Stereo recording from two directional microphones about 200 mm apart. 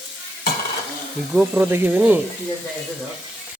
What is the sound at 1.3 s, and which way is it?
Speech, 5° right (ahead or behind).